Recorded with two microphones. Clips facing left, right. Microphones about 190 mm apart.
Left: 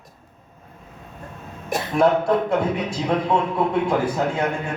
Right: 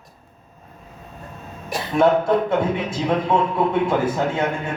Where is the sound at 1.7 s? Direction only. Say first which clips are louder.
Left 2 dB; 45° left (ahead or behind).